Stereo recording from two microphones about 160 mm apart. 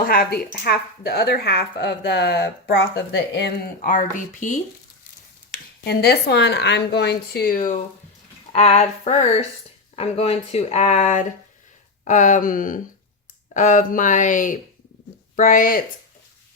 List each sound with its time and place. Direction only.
0.0 s speech: 65° left (ahead or behind)
5.8 s speech: 80° left; by 7.8 s 60° left (ahead or behind)
8.5 s speech: 40° left (ahead or behind); by 15.8 s 60° left (ahead or behind)